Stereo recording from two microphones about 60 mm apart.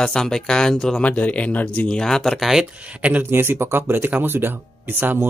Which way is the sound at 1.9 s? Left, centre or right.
Centre.